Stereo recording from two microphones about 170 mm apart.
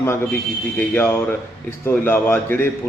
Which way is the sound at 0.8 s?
15° left (ahead or behind).